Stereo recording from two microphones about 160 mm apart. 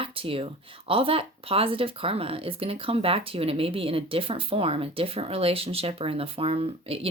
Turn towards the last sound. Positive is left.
turn(degrees=-35)  # may be behind; listen again after turning